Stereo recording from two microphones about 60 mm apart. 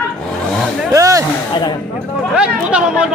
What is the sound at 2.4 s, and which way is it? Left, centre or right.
Chatter, centre.